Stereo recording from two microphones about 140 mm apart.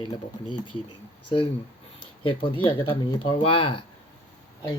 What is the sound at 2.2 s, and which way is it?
Speech, 40° left (ahead or behind).